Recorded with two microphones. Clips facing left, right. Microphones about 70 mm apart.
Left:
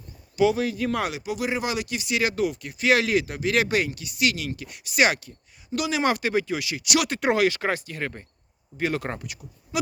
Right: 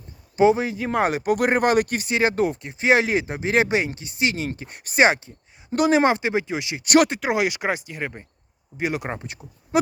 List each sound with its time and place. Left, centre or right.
0.3 s speech: right
1.0 s speech: right
2.0 s speech: right
6.8 s speech: right
7.3 s speech: centre
9.2 s speech: right